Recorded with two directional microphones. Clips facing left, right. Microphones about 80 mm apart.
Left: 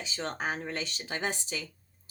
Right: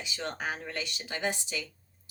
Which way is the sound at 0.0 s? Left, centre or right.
Left.